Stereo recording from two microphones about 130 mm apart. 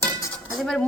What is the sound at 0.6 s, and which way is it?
Speech, 5° left (ahead or behind).